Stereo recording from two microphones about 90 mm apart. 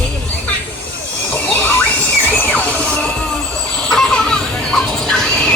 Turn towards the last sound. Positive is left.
turn(degrees=5)  # may be behind; listen again after turning